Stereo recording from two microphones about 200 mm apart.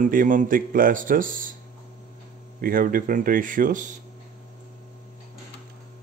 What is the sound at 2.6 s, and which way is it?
Speech, 45° right (ahead or behind).